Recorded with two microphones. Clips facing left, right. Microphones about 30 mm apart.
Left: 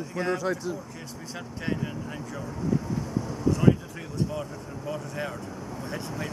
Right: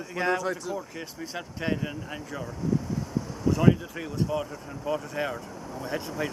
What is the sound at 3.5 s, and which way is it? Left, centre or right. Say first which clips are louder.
Speech: right 1 dB; centre.